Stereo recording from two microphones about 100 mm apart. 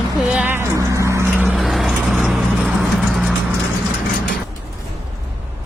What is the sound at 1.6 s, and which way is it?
Vehicle, centre (ahead or behind).